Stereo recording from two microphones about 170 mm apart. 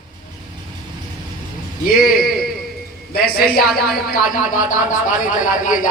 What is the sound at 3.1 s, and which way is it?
A woman's voice, 60° left (ahead or behind).